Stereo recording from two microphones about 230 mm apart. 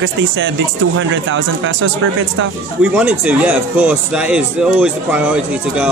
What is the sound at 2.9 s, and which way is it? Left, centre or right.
Speech, centre.